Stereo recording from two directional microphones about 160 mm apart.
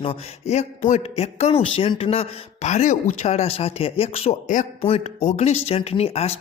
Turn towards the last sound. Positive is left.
turn(degrees=40)  # may be behind; listen again after turning